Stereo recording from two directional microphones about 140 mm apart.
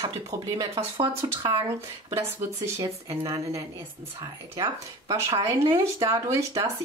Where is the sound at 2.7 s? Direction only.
25° right (ahead or behind).